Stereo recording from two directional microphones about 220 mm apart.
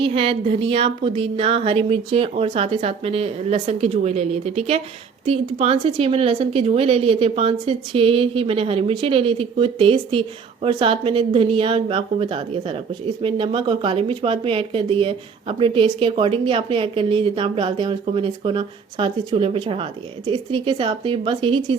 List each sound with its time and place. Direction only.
0.0 s a woman's voice: 25° right (ahead or behind)